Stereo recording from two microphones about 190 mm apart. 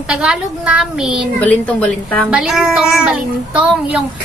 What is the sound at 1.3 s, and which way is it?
A woman's voice, 5° left (ahead or behind).